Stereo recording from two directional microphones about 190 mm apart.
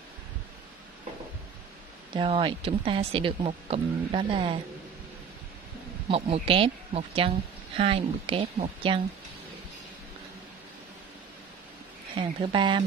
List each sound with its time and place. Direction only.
2.1 s a woman's voice: 25° right (ahead or behind)
6.0 s a woman's voice: 30° right (ahead or behind)
12.2 s a woman's voice: 25° right (ahead or behind)